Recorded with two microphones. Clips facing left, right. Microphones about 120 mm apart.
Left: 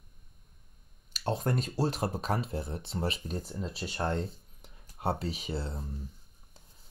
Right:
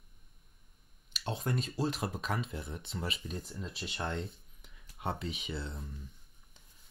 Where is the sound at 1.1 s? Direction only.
50° left (ahead or behind).